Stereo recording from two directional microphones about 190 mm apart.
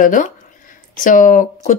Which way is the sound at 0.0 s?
45° left (ahead or behind).